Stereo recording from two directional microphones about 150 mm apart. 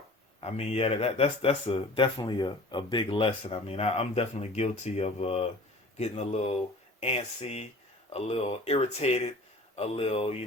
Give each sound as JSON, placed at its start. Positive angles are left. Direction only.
{"t": 0.3, "sound": "speech", "side_deg": 40}